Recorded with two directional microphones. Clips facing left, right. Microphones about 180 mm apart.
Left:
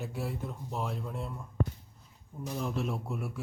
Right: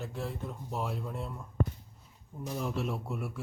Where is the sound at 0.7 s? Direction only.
Centre (ahead or behind).